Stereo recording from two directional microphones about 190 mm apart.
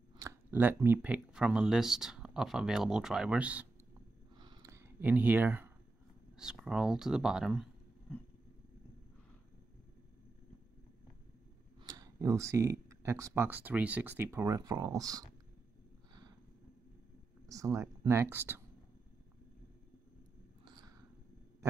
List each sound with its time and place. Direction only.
0.2 s speech: 15° right (ahead or behind)
4.4 s a sound: 20° right (ahead or behind)
6.3 s speech: 5° right (ahead or behind)
11.8 s speech: 20° right (ahead or behind)
17.5 s speech: 15° right (ahead or behind)
20.6 s a sound: 20° right (ahead or behind)